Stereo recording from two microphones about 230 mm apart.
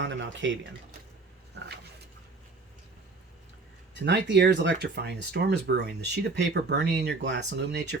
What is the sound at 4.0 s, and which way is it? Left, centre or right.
Speech, right.